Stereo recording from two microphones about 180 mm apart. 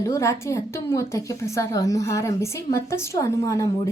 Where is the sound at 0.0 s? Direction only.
15° left (ahead or behind).